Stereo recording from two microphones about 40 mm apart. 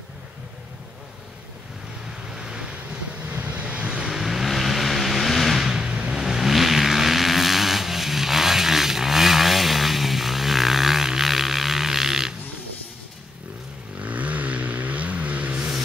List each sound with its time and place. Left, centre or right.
2.2 s vehicle: centre
3.2 s vehicle: right
3.6 s vehicle: right
4.1 s vehicle: centre
13.9 s vehicle: right